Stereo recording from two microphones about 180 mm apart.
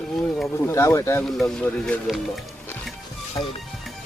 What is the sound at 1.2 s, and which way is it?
A man's voice, centre (ahead or behind).